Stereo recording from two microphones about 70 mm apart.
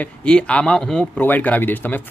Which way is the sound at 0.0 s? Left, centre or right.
Centre.